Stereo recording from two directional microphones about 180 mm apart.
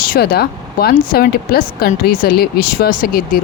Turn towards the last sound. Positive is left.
turn(degrees=55)  # may be behind; listen again after turning